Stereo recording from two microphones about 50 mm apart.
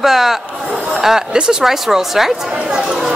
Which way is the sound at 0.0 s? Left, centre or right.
Centre.